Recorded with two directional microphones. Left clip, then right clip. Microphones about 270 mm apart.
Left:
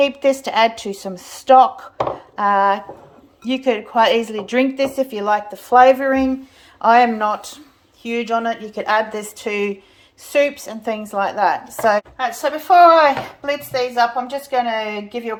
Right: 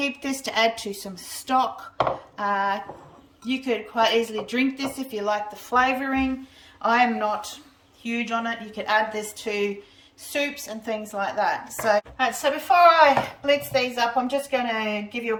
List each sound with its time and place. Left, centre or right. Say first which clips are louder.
0.0 s a woman's voice: left 12 dB; centre